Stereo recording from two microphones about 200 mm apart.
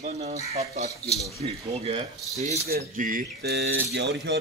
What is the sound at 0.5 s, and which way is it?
Speech, 30° right (ahead or behind).